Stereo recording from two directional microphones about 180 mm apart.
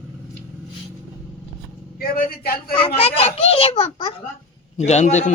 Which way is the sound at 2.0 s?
55° left (ahead or behind).